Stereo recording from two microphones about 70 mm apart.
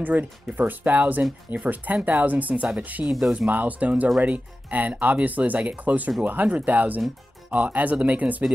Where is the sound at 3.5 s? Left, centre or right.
Right.